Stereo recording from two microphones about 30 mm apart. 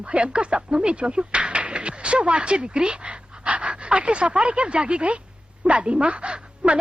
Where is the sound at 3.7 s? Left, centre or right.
Right.